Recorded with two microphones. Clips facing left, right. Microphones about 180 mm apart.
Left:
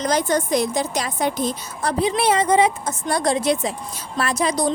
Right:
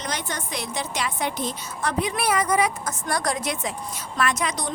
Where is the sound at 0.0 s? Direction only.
40° left (ahead or behind).